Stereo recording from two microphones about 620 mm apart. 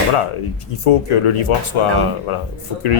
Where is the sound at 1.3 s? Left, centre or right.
Left.